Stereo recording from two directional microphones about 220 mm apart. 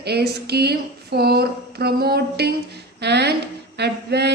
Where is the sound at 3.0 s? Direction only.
50° right (ahead or behind).